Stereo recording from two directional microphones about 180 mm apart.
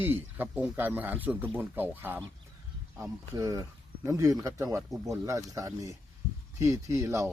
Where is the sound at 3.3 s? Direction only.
20° right (ahead or behind).